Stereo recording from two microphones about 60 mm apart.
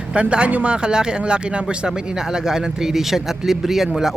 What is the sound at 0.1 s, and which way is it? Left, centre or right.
Speech, centre.